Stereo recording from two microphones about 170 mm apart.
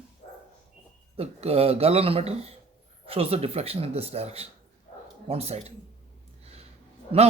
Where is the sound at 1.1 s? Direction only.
35° right (ahead or behind).